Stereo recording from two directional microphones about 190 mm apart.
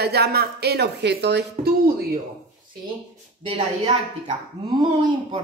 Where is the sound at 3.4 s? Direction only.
30° right (ahead or behind).